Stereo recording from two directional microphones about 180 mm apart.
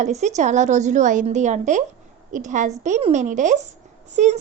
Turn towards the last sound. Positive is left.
turn(degrees=-40)  # may be behind; listen again after turning